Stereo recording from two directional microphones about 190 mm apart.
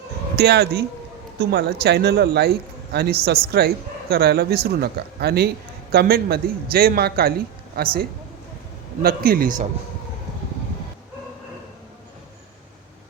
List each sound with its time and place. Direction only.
0.3 s a man's voice: 60° right (ahead or behind)
9.0 s a man's voice: 50° right (ahead or behind)